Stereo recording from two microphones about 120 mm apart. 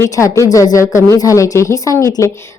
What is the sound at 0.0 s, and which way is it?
A woman's voice, 25° left (ahead or behind).